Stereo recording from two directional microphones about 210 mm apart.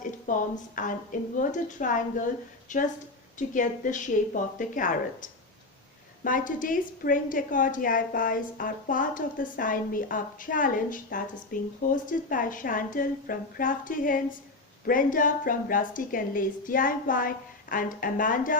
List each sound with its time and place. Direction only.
0.3 s a woman's voice: 40° left (ahead or behind)